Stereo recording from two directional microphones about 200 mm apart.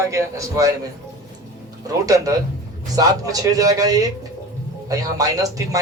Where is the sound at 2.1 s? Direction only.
15° right (ahead or behind).